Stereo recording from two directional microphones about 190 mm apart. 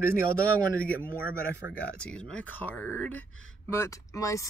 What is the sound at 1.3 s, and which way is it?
Speech, 10° right (ahead or behind).